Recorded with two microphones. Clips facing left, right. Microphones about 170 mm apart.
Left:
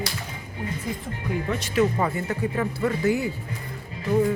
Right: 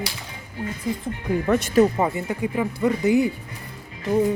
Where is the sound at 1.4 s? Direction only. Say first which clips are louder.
Right 7 dB; 55° right (ahead or behind).